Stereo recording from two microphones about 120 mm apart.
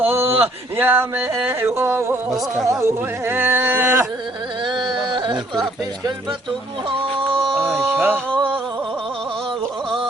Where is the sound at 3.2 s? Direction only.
20° right (ahead or behind).